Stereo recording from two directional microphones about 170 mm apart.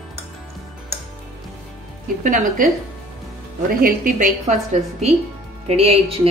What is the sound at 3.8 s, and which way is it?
Speech, 50° right (ahead or behind).